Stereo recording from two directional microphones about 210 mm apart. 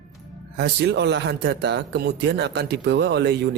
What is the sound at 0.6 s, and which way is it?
Speech, 55° right (ahead or behind).